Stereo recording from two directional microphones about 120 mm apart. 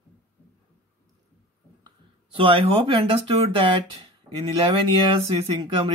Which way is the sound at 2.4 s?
50° right (ahead or behind).